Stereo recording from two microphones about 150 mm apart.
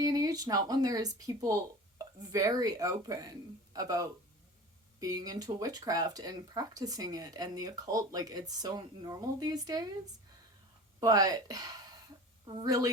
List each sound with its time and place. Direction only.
0.0 s speech: 25° right (ahead or behind)
11.0 s speech: 25° right (ahead or behind)